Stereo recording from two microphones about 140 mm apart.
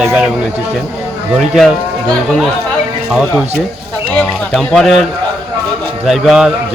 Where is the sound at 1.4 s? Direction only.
Centre (ahead or behind).